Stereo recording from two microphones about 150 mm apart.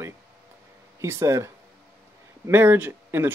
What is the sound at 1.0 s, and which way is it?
Speech, 20° right (ahead or behind).